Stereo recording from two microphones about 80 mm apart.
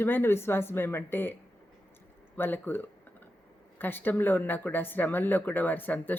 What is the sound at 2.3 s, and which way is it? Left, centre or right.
Speech, left.